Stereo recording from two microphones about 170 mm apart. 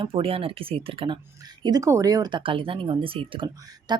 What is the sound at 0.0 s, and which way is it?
A woman's voice, 30° right (ahead or behind).